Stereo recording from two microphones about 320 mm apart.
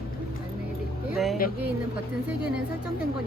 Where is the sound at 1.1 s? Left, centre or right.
Centre.